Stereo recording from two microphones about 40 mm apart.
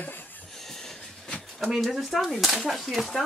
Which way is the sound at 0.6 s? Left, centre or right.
Centre.